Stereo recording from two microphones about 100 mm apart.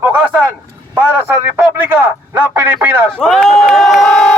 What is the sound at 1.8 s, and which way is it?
Speech, 20° right (ahead or behind).